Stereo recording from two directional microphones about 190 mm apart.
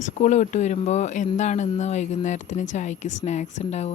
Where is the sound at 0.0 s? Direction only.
40° left (ahead or behind).